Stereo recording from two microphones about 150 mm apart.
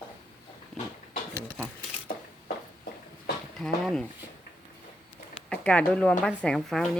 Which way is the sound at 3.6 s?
5° left (ahead or behind).